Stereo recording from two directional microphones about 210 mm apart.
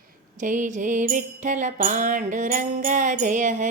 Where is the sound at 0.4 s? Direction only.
35° right (ahead or behind).